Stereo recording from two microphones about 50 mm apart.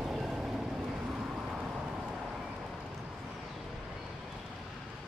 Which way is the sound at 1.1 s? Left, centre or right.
Right.